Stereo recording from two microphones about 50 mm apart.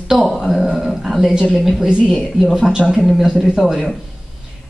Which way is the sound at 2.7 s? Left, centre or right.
Centre.